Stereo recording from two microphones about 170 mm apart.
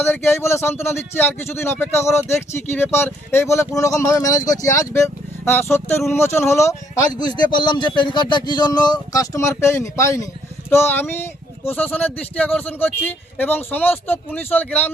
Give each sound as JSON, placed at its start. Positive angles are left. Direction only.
{"t": 0.0, "sound": "speech", "side_deg": 10}